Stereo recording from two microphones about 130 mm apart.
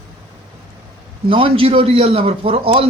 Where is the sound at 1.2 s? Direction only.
45° right (ahead or behind).